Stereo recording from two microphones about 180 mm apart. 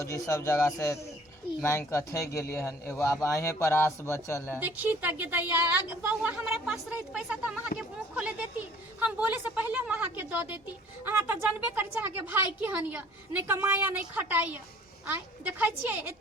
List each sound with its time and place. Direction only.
0.0 s a man's voice: 20° left (ahead or behind)
4.6 s a woman's voice: 10° right (ahead or behind)